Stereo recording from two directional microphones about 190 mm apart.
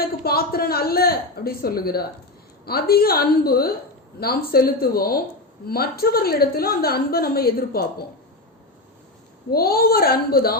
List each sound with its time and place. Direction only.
0.3 s a woman's voice: 55° left (ahead or behind)
9.5 s a woman's voice: 55° left (ahead or behind)